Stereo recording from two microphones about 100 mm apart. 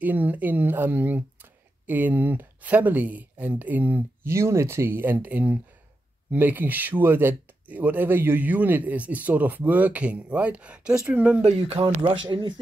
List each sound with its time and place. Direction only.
0.0 s speech: 15° right (ahead or behind)
11.4 s speech: 90° right
11.8 s speech: 55° right (ahead or behind)